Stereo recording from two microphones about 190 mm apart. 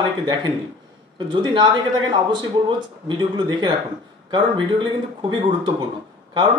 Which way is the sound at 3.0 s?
25° right (ahead or behind).